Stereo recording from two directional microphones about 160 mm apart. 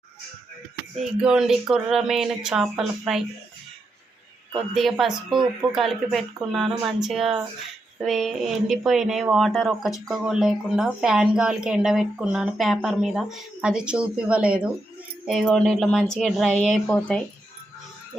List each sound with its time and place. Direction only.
1.2 s speech: 5° right (ahead or behind)
4.7 s speech: centre (ahead or behind)